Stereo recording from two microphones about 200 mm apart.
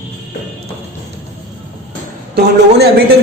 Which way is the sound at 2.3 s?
55° right (ahead or behind).